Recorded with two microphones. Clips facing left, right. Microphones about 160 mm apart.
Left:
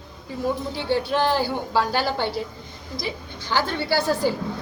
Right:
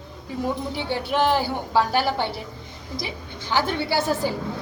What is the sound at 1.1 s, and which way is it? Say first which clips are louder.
A woman's voice: right 4 dB; 20° right (ahead or behind).